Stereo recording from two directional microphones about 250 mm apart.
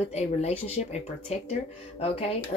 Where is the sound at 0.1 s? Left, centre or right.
Left.